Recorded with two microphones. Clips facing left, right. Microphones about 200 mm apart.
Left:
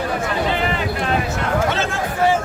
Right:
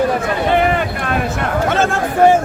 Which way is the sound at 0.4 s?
55° right (ahead or behind).